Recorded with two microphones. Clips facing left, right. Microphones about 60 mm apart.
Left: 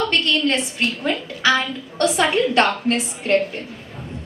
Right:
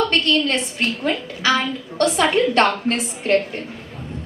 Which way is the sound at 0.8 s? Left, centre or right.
Right.